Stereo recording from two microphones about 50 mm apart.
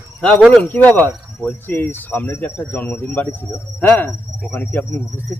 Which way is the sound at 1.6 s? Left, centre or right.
Left.